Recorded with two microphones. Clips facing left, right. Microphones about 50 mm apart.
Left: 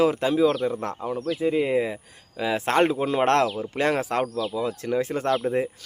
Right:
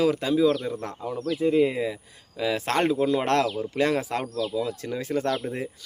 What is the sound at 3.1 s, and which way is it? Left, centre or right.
Speech, left.